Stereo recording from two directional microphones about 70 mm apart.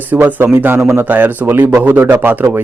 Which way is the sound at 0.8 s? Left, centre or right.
Right.